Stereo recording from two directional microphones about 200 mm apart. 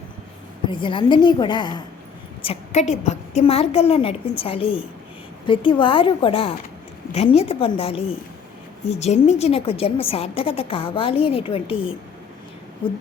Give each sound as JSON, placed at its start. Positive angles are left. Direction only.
{"t": 0.7, "sound": "a woman's voice", "side_deg": 25}